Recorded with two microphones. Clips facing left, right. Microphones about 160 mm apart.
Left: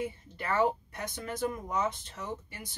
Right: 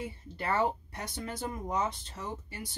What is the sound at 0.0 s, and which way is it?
Speech, 30° right (ahead or behind).